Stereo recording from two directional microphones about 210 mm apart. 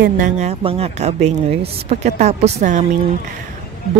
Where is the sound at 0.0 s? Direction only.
35° right (ahead or behind).